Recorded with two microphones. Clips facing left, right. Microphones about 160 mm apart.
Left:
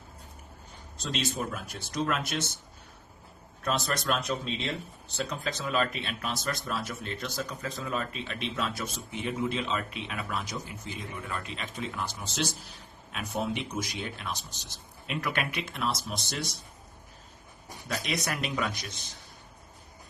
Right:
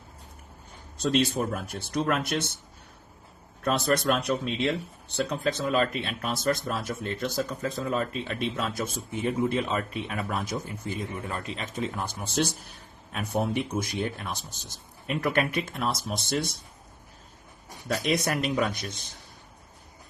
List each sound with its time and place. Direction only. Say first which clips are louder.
1.1 s speech: right 6 dB; 55° right (ahead or behind)
3.6 s a man's voice: right 6 dB; 55° right (ahead or behind)
17.8 s a man's voice: right 6 dB; 45° right (ahead or behind)